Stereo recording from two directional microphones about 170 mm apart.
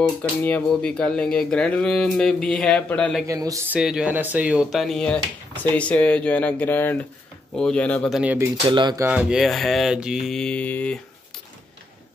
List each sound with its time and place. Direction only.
0.2 s speech: 10° left (ahead or behind)
3.3 s speech: 20° right (ahead or behind)
3.7 s speech: 5° right (ahead or behind)
8.2 s speech: 10° right (ahead or behind)
8.6 s speech: 25° right (ahead or behind)
9.0 s speech: 5° right (ahead or behind)